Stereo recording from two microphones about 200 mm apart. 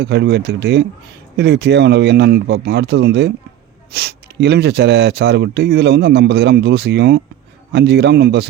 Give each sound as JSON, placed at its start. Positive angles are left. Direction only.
{"t": 0.0, "sound": "speech", "side_deg": -55}